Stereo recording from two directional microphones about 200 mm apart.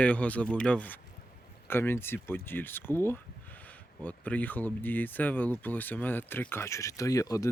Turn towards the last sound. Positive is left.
turn(degrees=15)  # may be behind; listen again after turning